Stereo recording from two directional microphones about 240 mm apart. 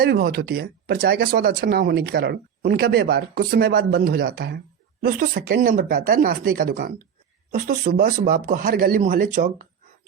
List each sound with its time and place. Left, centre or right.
0.0 s speech: right